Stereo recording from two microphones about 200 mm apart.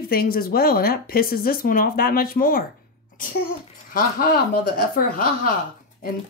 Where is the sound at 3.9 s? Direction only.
45° left (ahead or behind).